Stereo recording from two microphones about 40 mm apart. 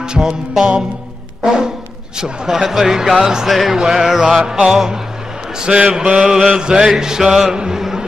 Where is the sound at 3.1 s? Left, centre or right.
Centre.